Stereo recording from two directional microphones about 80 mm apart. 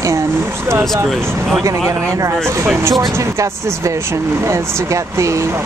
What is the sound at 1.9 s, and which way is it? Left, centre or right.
Speech, right.